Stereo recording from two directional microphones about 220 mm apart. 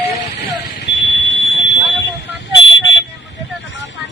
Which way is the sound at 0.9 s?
55° left (ahead or behind).